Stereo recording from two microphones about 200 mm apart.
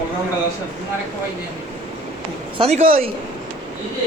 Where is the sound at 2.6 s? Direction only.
35° right (ahead or behind).